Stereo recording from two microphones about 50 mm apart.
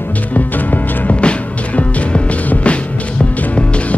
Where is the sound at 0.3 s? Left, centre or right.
Left.